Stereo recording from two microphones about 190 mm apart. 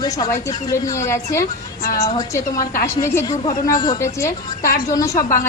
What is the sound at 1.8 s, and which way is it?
A woman's voice, 20° left (ahead or behind).